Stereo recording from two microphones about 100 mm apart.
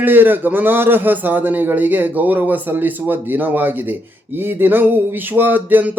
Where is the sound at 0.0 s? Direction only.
20° right (ahead or behind).